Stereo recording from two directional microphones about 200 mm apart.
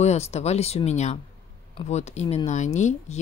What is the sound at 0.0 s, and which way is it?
Speech, 35° left (ahead or behind).